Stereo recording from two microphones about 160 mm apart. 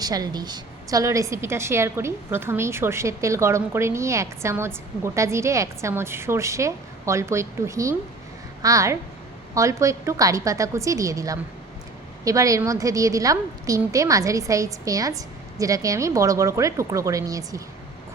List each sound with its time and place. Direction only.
0.0 s a woman's voice: 25° right (ahead or behind)